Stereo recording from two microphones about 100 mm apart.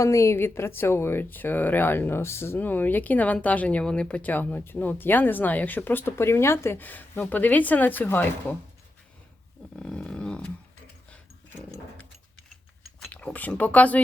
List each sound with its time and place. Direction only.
0.0 s speech: 30° left (ahead or behind)
9.7 s speech: 10° left (ahead or behind)
13.1 s speech: 15° left (ahead or behind)